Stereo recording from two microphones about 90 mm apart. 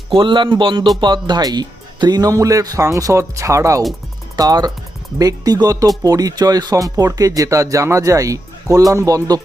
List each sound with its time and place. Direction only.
0.1 s speech: 65° right (ahead or behind)
1.0 s speech: 55° right (ahead or behind); by 3.8 s 35° right (ahead or behind)
4.4 s speech: 45° right (ahead or behind)